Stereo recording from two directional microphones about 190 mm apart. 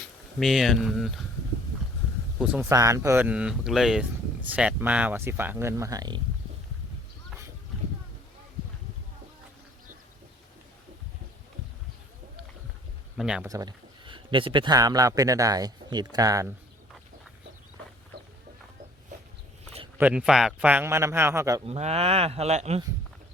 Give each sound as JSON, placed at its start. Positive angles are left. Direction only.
{"t": 0.3, "sound": "speech", "side_deg": 0}
{"t": 2.4, "sound": "speech", "side_deg": -5}
{"t": 2.6, "sound": "speech", "side_deg": -15}
{"t": 13.1, "sound": "speech", "side_deg": -5}
{"t": 13.5, "sound": "a man's voice", "side_deg": -20}
{"t": 20.0, "sound": "speech", "side_deg": -5}
{"t": 21.7, "sound": "speech", "side_deg": -35}